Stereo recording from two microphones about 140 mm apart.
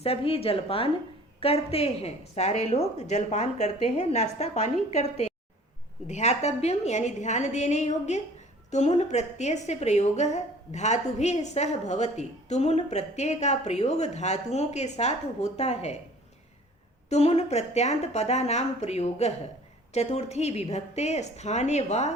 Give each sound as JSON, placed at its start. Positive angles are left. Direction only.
{"t": 0.0, "sound": "a woman's voice", "side_deg": 45}
{"t": 17.1, "sound": "a woman's voice", "side_deg": 50}